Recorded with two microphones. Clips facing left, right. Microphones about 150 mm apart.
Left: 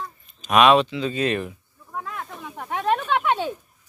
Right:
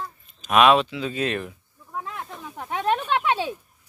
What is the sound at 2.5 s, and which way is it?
Speech, 10° right (ahead or behind).